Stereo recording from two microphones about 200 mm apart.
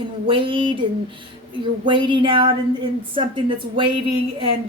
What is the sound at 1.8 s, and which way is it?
A woman's voice, 25° right (ahead or behind).